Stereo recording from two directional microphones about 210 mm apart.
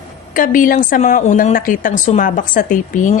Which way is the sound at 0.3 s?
40° left (ahead or behind).